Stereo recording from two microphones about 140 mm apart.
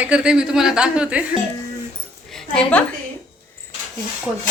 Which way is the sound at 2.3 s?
10° left (ahead or behind).